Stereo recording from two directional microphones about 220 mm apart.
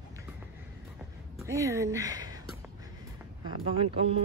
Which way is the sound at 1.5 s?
15° right (ahead or behind).